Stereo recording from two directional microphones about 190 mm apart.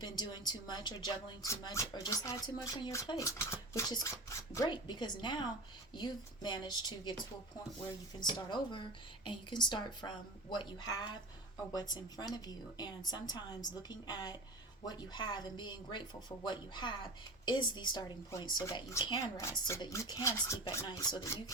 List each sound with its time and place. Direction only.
0.0 s speech: 20° left (ahead or behind)
8.2 s speech: 25° left (ahead or behind)